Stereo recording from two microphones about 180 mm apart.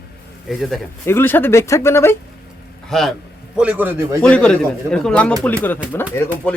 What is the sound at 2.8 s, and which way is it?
A man's voice, centre (ahead or behind).